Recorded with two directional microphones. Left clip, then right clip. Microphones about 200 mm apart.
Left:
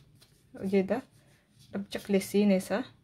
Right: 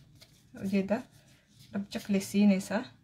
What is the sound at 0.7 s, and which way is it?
Speech, 40° left (ahead or behind).